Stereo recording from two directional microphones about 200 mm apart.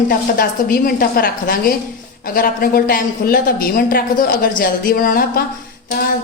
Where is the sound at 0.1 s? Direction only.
45° left (ahead or behind).